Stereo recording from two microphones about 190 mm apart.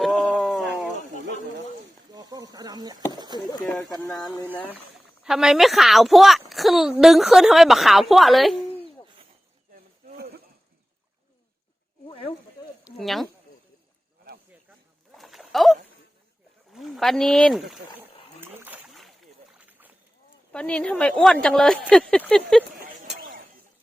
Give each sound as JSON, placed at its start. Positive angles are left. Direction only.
{"t": 0.0, "sound": "dog", "side_deg": 0}
{"t": 2.1, "sound": "a sound", "side_deg": -20}
{"t": 3.3, "sound": "speech", "side_deg": -20}
{"t": 3.8, "sound": "speech", "side_deg": 15}
{"t": 5.2, "sound": "a woman's voice", "side_deg": -5}
{"t": 12.0, "sound": "snake", "side_deg": 30}
{"t": 12.8, "sound": "speech", "side_deg": 0}
{"t": 15.1, "sound": "a sound", "side_deg": 0}
{"t": 16.7, "sound": "speech", "side_deg": 0}
{"t": 18.3, "sound": "rowboat", "side_deg": -10}
{"t": 20.5, "sound": "a woman's voice", "side_deg": 5}